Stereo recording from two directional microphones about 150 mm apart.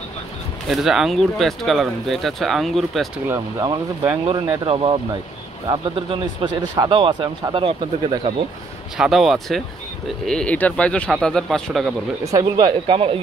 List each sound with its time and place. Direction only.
0.7 s speech: centre (ahead or behind)
3.3 s speech: 25° right (ahead or behind)
4.3 s speech: 35° right (ahead or behind)
8.9 s speech: 5° right (ahead or behind)
12.2 s speech: 20° right (ahead or behind)